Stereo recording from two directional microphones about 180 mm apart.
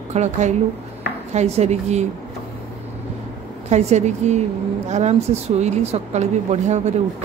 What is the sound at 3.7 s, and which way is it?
A woman's voice, 40° right (ahead or behind).